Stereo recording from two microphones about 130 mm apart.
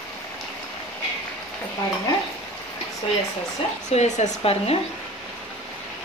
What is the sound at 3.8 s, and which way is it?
Speech, 65° left (ahead or behind).